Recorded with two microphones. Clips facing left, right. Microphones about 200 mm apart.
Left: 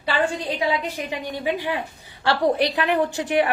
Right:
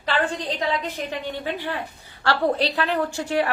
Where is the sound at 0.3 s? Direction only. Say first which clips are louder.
Left 2 dB; 10° left (ahead or behind).